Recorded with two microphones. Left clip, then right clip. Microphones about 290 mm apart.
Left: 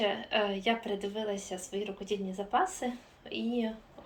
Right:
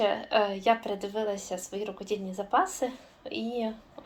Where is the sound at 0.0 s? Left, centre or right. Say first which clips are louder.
Right 4 dB; centre.